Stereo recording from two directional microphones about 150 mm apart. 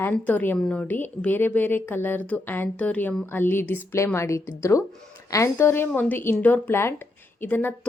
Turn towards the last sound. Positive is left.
turn(degrees=10)  # may be behind; listen again after turning